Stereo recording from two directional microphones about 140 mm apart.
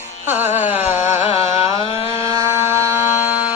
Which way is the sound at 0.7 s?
15° right (ahead or behind).